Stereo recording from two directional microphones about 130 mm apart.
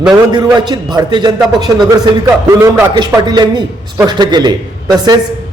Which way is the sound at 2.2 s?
20° right (ahead or behind).